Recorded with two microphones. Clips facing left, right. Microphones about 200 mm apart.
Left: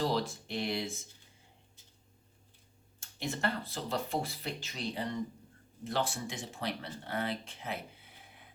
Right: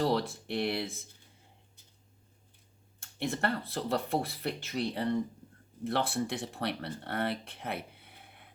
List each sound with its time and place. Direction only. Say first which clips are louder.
0.0 s speech: right 3 dB; 60° right (ahead or behind)
3.0 s speech: right 3 dB; 60° right (ahead or behind)